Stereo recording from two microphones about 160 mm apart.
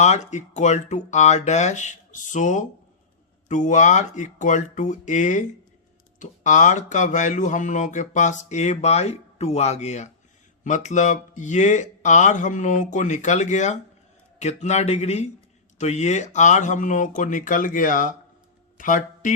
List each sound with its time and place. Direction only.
0.0 s speech: 45° left (ahead or behind)